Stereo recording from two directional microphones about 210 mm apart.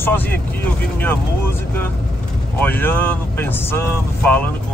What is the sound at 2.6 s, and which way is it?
Speech, 10° left (ahead or behind).